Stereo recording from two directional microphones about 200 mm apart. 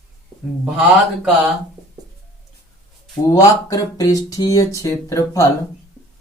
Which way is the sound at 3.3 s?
15° left (ahead or behind).